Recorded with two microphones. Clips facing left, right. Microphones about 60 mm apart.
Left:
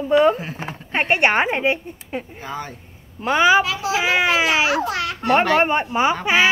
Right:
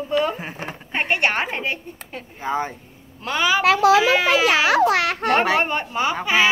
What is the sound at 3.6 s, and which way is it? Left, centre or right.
Speech, right.